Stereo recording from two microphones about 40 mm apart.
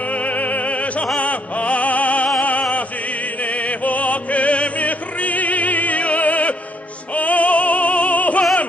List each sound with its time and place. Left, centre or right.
0.1 s opera: left
3.4 s opera: left
7.2 s music: left